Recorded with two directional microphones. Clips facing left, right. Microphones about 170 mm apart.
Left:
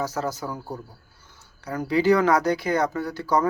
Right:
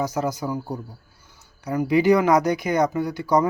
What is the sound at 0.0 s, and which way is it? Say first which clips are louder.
Speech: right 3 dB; 15° right (ahead or behind).